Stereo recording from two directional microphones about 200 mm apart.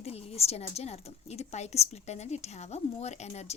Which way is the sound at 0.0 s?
30° left (ahead or behind).